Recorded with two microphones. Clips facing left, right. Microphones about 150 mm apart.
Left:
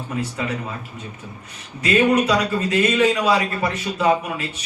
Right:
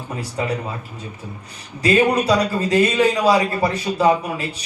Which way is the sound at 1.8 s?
35° right (ahead or behind).